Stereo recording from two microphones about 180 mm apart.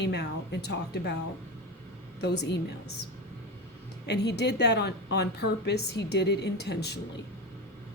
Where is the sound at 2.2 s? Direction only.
70° left (ahead or behind).